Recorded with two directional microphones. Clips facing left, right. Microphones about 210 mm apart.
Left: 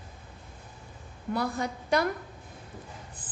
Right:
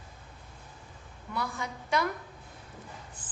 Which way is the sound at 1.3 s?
35° left (ahead or behind).